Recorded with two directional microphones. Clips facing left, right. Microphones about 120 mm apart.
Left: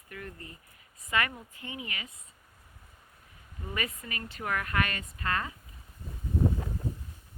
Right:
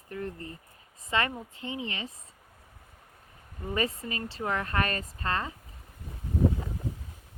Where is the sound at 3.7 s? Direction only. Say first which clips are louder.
Right 6 dB; 30° right (ahead or behind).